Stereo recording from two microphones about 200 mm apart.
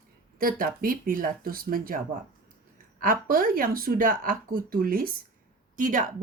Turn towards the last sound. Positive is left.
turn(degrees=-40)  # may be behind; listen again after turning